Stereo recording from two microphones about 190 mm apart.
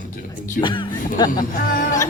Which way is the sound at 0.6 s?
25° left (ahead or behind).